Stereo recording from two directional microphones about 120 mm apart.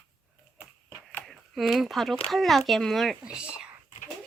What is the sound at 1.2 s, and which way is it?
A child's voice, centre (ahead or behind).